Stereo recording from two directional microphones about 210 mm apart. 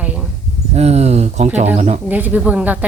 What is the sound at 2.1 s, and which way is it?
Speech, 10° right (ahead or behind).